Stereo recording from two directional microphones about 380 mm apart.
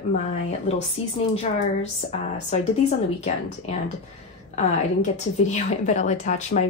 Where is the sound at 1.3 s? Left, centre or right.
Centre.